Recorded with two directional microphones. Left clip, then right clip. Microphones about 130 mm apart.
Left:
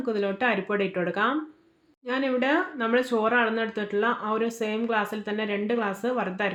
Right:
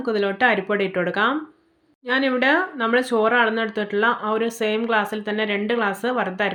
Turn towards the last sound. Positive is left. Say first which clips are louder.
# right 5 dB
turn(degrees=-25)  # may be behind; listen again after turning